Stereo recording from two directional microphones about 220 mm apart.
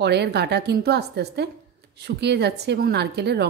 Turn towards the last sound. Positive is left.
turn(degrees=-50)  # may be behind; listen again after turning